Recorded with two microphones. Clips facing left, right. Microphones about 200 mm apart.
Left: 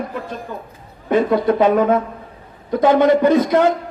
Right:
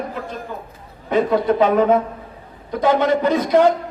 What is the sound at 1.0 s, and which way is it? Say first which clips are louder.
Speech: left 2 dB; 50° left (ahead or behind).